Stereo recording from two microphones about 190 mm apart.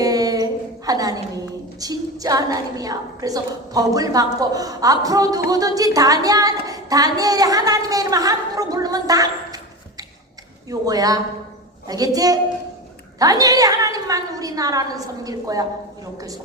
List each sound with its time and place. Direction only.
0.0 s humming: 20° right (ahead or behind)
0.9 s a sound: 20° right (ahead or behind)
1.8 s a woman's voice: 20° right (ahead or behind)
10.7 s a woman's voice: 20° right (ahead or behind)